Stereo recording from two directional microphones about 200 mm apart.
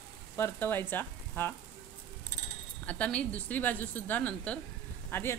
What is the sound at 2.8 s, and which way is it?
Speech, 5° left (ahead or behind).